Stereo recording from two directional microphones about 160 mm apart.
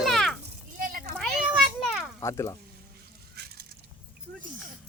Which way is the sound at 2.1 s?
20° left (ahead or behind).